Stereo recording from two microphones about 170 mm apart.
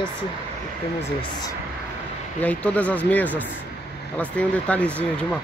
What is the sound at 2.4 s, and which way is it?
Speech, 10° left (ahead or behind).